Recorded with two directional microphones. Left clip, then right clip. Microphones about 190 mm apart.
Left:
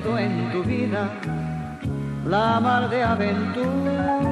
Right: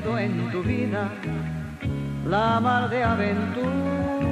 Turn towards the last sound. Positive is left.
turn(degrees=25)  # may be behind; listen again after turning